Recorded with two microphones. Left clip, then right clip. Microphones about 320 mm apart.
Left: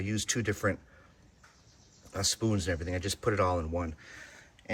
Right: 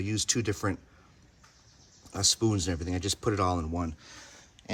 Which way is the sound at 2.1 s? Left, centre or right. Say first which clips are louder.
Right 4 dB; centre.